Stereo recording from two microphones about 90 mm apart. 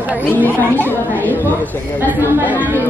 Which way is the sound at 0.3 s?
20° left (ahead or behind).